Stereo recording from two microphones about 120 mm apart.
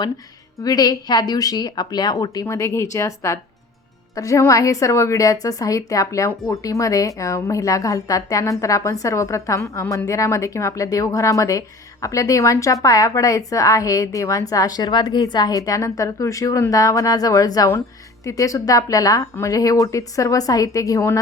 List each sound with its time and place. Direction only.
0.6 s a woman's voice: 30° left (ahead or behind)